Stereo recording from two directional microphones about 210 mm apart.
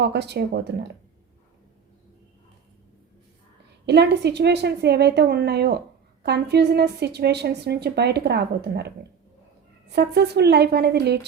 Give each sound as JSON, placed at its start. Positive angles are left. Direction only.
{"t": 0.0, "sound": "a woman's voice", "side_deg": -55}
{"t": 3.8, "sound": "a woman's voice", "side_deg": -55}
{"t": 9.9, "sound": "a woman's voice", "side_deg": -50}